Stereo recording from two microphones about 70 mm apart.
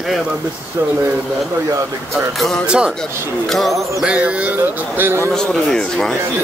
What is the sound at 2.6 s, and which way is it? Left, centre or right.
Speech, centre.